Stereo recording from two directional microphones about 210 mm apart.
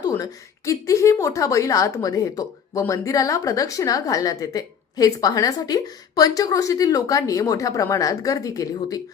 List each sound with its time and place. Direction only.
0.0 s a woman's voice: 15° left (ahead or behind)